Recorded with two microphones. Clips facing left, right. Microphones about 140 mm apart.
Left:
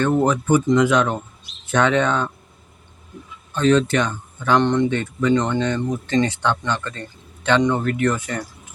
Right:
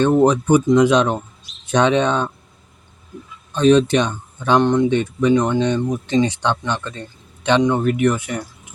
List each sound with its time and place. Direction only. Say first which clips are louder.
0.0 s speech: right 4 dB; 20° right (ahead or behind)
3.5 s speech: right 3 dB; 15° right (ahead or behind)